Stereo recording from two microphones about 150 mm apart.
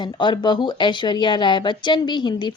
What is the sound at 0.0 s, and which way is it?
A woman's voice, 30° left (ahead or behind).